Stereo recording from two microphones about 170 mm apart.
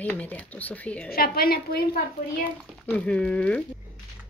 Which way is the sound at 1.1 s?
60° left (ahead or behind).